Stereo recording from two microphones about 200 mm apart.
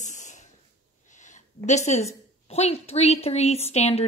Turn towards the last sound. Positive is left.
turn(degrees=30)  # may be behind; listen again after turning